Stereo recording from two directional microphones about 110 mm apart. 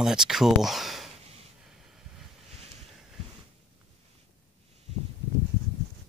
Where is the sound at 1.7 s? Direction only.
5° right (ahead or behind).